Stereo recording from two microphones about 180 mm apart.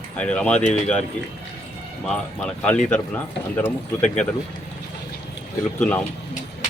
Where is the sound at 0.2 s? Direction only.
5° left (ahead or behind).